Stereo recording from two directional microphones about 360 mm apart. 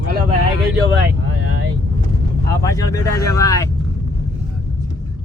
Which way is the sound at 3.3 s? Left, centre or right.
Centre.